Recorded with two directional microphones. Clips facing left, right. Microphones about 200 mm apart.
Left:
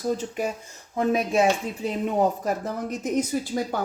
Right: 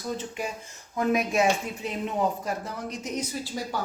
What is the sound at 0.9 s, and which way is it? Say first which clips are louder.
A woman's voice: left 2 dB; 30° left (ahead or behind).